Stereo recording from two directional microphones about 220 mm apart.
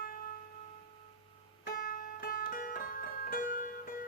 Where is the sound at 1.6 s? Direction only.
40° left (ahead or behind).